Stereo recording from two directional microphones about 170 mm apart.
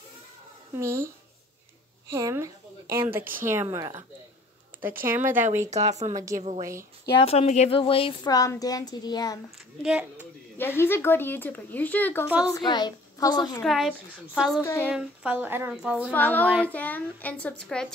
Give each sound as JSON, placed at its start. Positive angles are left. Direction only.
{"t": 0.7, "sound": "a woman's voice", "side_deg": -15}
{"t": 2.1, "sound": "a woman's voice", "side_deg": -20}
{"t": 5.0, "sound": "a woman's voice", "side_deg": -10}
{"t": 5.7, "sound": "speech", "side_deg": -40}
{"t": 7.2, "sound": "speech", "side_deg": 35}
{"t": 9.8, "sound": "a woman's voice", "side_deg": -5}
{"t": 10.8, "sound": "speech", "side_deg": 15}
{"t": 12.3, "sound": "a woman's voice", "side_deg": -10}
{"t": 12.5, "sound": "speech", "side_deg": 25}
{"t": 13.7, "sound": "a woman's voice", "side_deg": 0}
{"t": 14.6, "sound": "speech", "side_deg": 15}
{"t": 14.9, "sound": "a woman's voice", "side_deg": -5}
{"t": 16.1, "sound": "speech", "side_deg": 10}